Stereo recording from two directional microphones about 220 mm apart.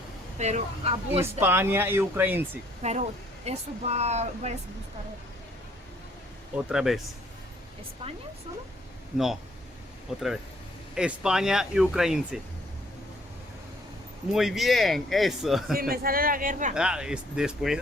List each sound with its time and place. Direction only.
0.3 s speech: 30° right (ahead or behind)
1.2 s speech: 10° right (ahead or behind)
2.8 s speech: 30° right (ahead or behind)
6.6 s speech: 5° right (ahead or behind)
9.1 s speech: centre (ahead or behind)
10.9 s speech: 5° right (ahead or behind)
14.3 s speech: centre (ahead or behind)
15.8 s speech: 40° right (ahead or behind)
16.7 s speech: 5° right (ahead or behind)